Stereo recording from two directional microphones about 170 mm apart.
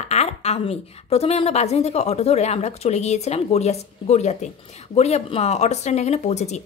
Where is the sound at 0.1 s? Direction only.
40° left (ahead or behind).